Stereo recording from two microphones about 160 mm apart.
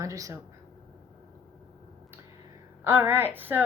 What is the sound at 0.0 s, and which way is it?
Speech, 20° right (ahead or behind).